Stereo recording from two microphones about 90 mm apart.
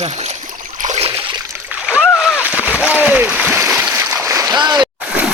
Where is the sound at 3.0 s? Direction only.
15° right (ahead or behind); by 4.5 s 35° right (ahead or behind).